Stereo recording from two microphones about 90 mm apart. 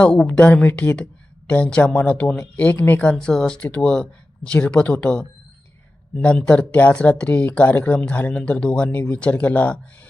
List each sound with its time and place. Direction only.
0.0 s speech: 10° left (ahead or behind)
2.6 s speech: 20° left (ahead or behind)